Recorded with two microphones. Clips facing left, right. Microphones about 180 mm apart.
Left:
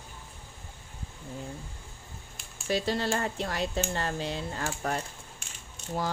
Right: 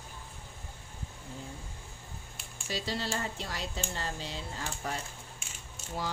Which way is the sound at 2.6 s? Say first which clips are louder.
Left 7 dB; 55° left (ahead or behind).